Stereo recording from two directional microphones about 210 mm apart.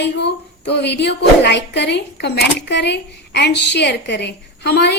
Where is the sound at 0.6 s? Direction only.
55° left (ahead or behind).